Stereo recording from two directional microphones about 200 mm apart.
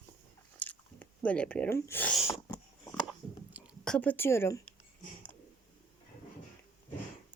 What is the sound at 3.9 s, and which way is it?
Speech, 10° left (ahead or behind).